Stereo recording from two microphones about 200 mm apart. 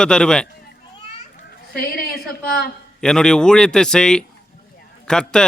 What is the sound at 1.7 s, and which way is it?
Speech, 50° left (ahead or behind).